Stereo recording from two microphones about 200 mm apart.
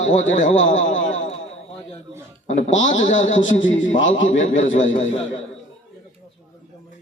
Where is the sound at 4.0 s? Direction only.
70° left (ahead or behind).